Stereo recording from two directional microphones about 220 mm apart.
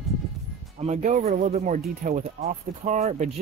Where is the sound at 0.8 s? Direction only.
30° right (ahead or behind).